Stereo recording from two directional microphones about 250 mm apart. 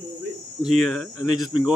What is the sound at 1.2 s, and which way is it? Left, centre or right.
Speech, centre.